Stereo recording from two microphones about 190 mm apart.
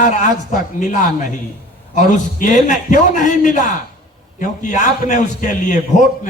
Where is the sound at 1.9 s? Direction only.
45° left (ahead or behind).